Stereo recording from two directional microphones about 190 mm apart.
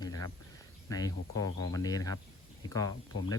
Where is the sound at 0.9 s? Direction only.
20° left (ahead or behind).